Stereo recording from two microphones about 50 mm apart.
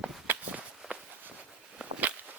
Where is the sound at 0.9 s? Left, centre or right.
Right.